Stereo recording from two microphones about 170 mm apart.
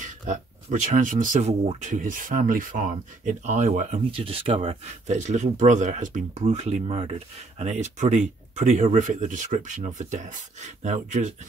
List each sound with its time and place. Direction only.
0.0 s speech: 45° right (ahead or behind)
3.3 s speech: 45° right (ahead or behind)
4.1 s speech: 35° right (ahead or behind)